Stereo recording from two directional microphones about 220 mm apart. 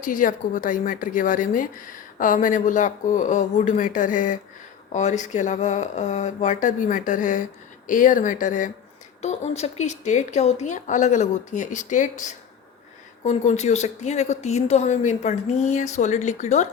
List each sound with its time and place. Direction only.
0.0 s a woman's voice: 35° left (ahead or behind)